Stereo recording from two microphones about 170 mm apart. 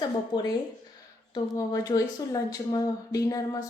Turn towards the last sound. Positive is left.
turn(degrees=20)  # may be behind; listen again after turning